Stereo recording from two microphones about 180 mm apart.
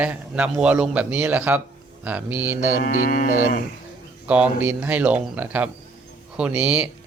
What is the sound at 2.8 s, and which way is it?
Livestock, 50° left (ahead or behind).